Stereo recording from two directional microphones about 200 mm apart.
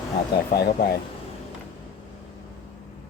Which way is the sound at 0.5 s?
55° left (ahead or behind).